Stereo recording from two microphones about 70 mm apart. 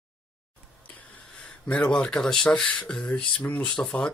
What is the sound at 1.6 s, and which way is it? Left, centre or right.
Speech, centre.